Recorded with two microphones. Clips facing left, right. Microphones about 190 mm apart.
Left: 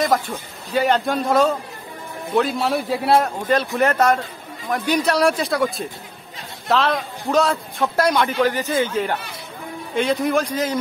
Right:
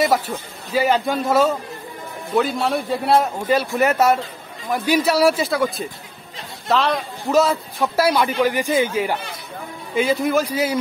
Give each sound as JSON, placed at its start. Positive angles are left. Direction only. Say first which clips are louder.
{"t": 0.0, "sound": "a man's voice", "louder": "right 1 dB", "side_deg": -10}